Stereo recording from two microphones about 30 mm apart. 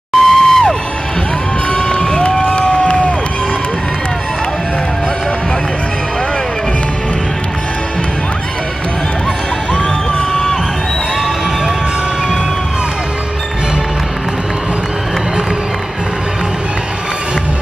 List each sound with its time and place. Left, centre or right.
0.1 s music: centre
1.7 s cheering: left
2.5 s crowd: left
10.3 s crowd: centre